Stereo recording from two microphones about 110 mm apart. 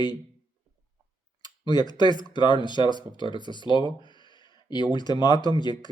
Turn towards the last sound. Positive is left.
turn(degrees=40)  # may be behind; listen again after turning